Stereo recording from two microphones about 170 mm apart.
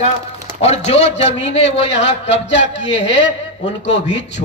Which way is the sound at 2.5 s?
90° left.